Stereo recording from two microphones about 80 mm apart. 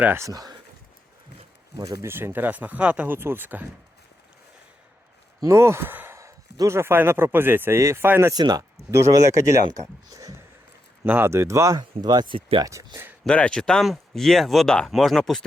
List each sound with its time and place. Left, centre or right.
0.2 s speech: right
1.7 s speech: right
2.0 s speech: right
3.2 s speech: right
5.4 s speech: right
6.1 s a man's voice: right
8.3 s speech: right
8.9 s speech: right
11.0 s speech: right
11.3 s speech: right
11.8 s speech: right
12.6 s speech: right
13.2 s speech: centre